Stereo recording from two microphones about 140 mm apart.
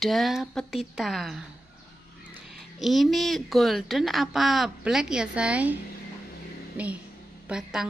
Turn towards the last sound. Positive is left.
turn(degrees=-5)  # may be behind; listen again after turning